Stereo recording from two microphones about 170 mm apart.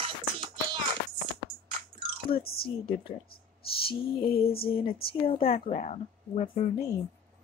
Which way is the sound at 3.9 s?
60° left (ahead or behind).